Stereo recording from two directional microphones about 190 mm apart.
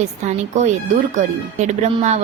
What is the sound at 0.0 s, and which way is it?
A woman's voice, 40° right (ahead or behind).